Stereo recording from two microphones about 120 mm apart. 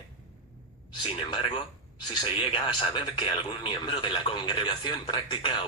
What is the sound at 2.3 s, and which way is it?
A man's voice, 45° left (ahead or behind).